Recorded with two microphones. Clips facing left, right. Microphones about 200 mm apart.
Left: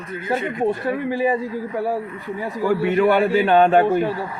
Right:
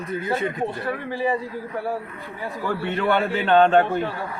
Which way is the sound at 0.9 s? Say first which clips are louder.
Left 4 dB; 15° left (ahead or behind).